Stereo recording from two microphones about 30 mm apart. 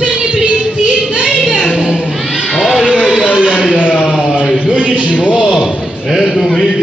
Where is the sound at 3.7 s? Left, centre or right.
Left.